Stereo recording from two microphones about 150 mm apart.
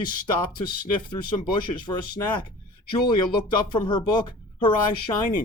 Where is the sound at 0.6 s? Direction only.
30° left (ahead or behind).